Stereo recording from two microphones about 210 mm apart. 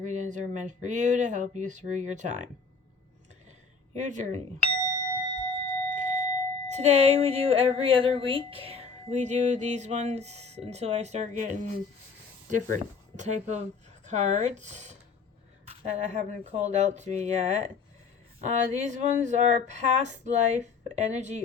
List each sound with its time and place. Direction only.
0.0 s speech: 35° right (ahead or behind)
3.9 s speech: 35° right (ahead or behind)
5.9 s speech: 35° right (ahead or behind)